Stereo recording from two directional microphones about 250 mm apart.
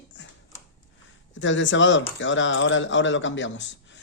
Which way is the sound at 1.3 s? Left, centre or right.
Left.